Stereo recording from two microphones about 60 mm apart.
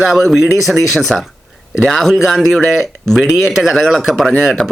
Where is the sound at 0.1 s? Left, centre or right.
Centre.